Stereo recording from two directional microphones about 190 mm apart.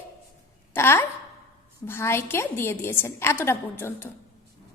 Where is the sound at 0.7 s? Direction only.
15° left (ahead or behind).